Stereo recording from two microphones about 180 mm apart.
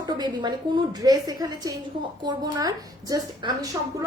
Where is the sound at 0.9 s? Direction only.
20° right (ahead or behind).